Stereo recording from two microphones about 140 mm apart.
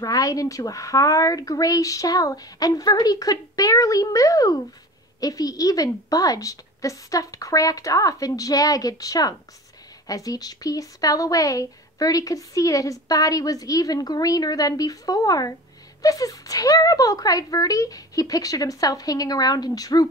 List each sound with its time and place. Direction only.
0.0 s speech: 25° left (ahead or behind)